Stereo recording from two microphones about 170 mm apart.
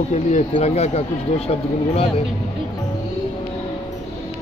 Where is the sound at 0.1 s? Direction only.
40° left (ahead or behind).